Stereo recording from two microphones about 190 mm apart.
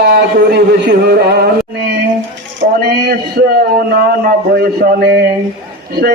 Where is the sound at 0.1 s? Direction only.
60° right (ahead or behind).